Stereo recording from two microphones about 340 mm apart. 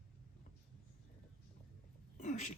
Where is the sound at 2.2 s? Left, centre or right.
Left.